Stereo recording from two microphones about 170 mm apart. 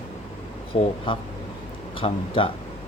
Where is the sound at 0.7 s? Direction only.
35° left (ahead or behind).